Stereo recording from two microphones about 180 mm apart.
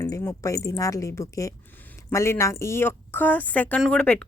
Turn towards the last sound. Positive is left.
turn(degrees=5)  # may be behind; listen again after turning